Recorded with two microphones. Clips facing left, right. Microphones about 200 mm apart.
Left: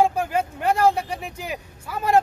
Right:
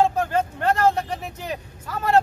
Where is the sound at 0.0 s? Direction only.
10° left (ahead or behind).